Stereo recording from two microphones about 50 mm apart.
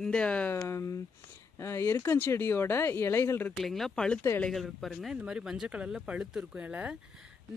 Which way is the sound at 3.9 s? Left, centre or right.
Centre.